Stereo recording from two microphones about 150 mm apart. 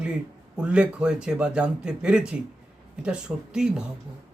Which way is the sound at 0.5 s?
5° right (ahead or behind).